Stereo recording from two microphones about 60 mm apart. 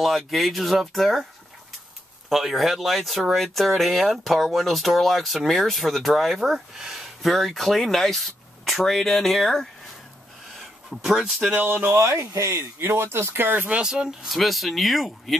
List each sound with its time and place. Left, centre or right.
0.0 s speech: centre
2.2 s speech: centre
10.9 s speech: centre
11.5 s speech: right
12.0 s speech: right
12.8 s speech: right
13.7 s speech: centre
14.3 s speech: centre